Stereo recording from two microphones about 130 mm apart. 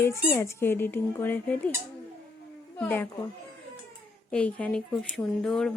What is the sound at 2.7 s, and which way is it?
Speech, 15° left (ahead or behind).